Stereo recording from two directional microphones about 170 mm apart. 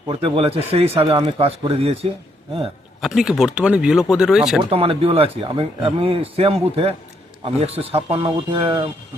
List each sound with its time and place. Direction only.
0.1 s speech: 30° right (ahead or behind)
3.0 s speech: centre (ahead or behind)
4.7 s speech: 35° right (ahead or behind)